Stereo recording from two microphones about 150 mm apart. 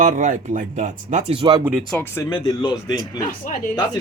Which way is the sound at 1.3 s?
30° right (ahead or behind).